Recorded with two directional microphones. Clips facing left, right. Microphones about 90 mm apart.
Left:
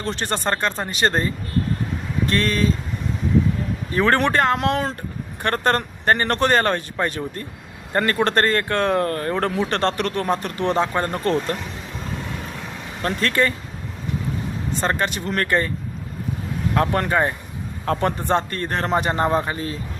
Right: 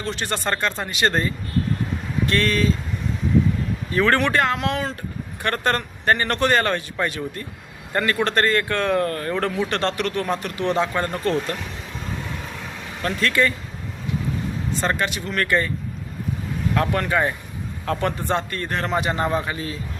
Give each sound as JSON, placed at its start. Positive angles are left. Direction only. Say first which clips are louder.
{"t": 0.0, "sound": "speech", "louder": "left 2 dB", "side_deg": 35}
{"t": 2.3, "sound": "speech", "louder": "even", "side_deg": 30}
{"t": 3.9, "sound": "speech", "louder": "left 1 dB", "side_deg": 30}
{"t": 5.4, "sound": "speech", "louder": "left 2 dB", "side_deg": 35}
{"t": 13.0, "sound": "speech", "louder": "even", "side_deg": 35}
{"t": 14.8, "sound": "speech", "louder": "left 2 dB", "side_deg": 35}
{"t": 16.7, "sound": "speech", "louder": "left 2 dB", "side_deg": 35}